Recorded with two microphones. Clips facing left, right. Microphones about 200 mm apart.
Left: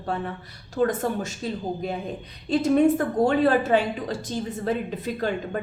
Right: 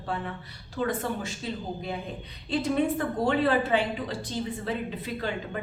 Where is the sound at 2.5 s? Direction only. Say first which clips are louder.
Left 7 dB; 45° left (ahead or behind).